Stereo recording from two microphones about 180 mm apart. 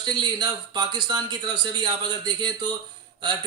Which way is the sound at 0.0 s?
25° right (ahead or behind).